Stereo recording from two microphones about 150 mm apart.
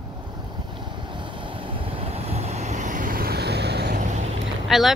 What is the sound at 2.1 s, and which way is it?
Vehicle, 45° right (ahead or behind).